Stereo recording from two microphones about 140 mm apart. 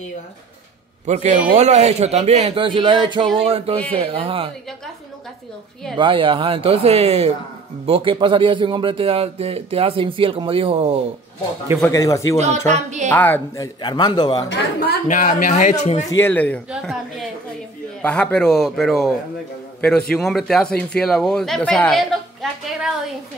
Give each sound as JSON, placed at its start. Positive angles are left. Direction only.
{"t": 1.0, "sound": "speech", "side_deg": -55}
{"t": 3.3, "sound": "a man's voice", "side_deg": -45}
{"t": 5.9, "sound": "a man's voice", "side_deg": -35}
{"t": 11.9, "sound": "speech", "side_deg": 25}
{"t": 12.4, "sound": "speech", "side_deg": -55}
{"t": 13.1, "sound": "speech", "side_deg": 15}
{"t": 13.7, "sound": "a man's voice", "side_deg": 30}
{"t": 15.0, "sound": "a man's voice", "side_deg": 70}
{"t": 16.2, "sound": "speech", "side_deg": 15}
{"t": 16.7, "sound": "speech", "side_deg": 0}
{"t": 22.4, "sound": "a woman's voice", "side_deg": -5}